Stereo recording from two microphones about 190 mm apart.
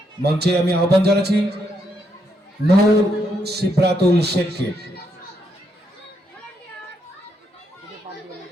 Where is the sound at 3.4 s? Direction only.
60° right (ahead or behind).